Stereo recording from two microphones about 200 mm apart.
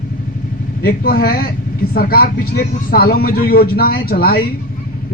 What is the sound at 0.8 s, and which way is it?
Speech, 50° left (ahead or behind).